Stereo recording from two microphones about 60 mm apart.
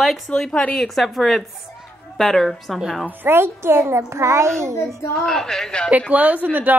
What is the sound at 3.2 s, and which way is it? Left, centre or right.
A child's voice, right.